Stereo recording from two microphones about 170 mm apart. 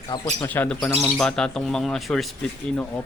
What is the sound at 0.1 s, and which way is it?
Speech, 25° left (ahead or behind).